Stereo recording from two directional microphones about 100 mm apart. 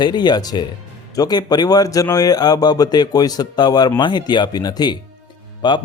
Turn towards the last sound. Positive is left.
turn(degrees=50)  # may be behind; listen again after turning